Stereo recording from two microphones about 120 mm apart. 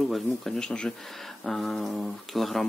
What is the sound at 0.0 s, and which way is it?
Speech, centre (ahead or behind).